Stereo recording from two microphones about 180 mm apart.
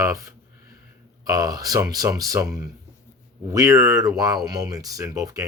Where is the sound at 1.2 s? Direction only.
20° right (ahead or behind).